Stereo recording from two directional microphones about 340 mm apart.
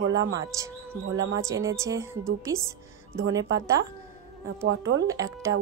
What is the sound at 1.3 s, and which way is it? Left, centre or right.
A woman's voice, centre.